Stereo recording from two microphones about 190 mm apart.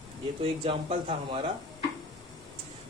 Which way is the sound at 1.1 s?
30° right (ahead or behind).